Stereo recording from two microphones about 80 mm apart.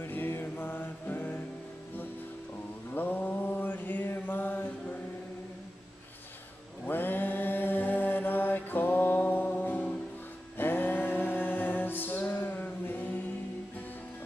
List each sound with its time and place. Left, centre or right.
0.0 s music: left
2.9 s mantra: left
6.9 s mantra: left
10.6 s a sound: left